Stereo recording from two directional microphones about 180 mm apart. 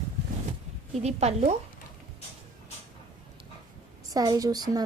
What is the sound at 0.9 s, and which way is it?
Speech, 35° right (ahead or behind).